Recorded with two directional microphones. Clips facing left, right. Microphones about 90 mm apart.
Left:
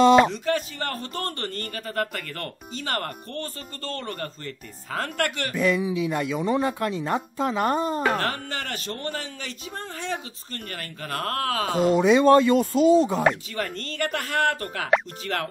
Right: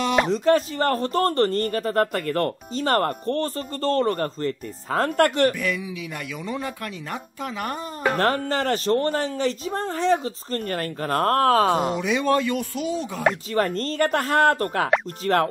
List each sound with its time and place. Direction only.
0.3 s a man's voice: 35° right (ahead or behind)
5.5 s speech: 25° left (ahead or behind)
8.2 s a man's voice: 35° right (ahead or behind)
12.0 s speech: 30° left (ahead or behind)
13.5 s a man's voice: 40° right (ahead or behind)